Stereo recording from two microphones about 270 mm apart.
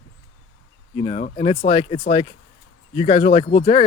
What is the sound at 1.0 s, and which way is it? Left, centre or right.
Speech, left.